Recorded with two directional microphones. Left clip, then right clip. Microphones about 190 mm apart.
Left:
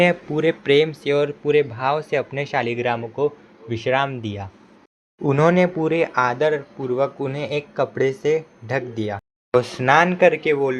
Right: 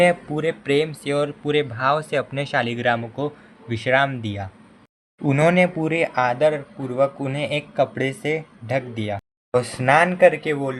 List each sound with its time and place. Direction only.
0.0 s speech: 25° left (ahead or behind)